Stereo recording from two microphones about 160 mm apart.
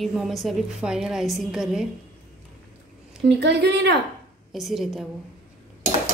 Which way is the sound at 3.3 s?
90° right.